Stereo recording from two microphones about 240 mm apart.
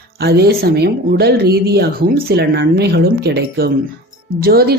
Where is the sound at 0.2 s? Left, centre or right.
Right.